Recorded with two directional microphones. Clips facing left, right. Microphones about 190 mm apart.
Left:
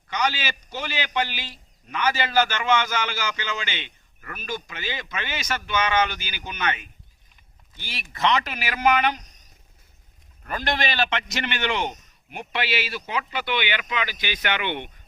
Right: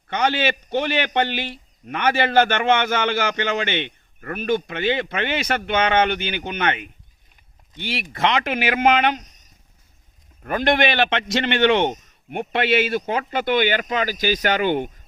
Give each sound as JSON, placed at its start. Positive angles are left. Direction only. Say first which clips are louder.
{"t": 0.1, "sound": "a man's voice", "louder": "right 6 dB", "side_deg": -55}
{"t": 10.4, "sound": "a man's voice", "louder": "right 8 dB", "side_deg": -55}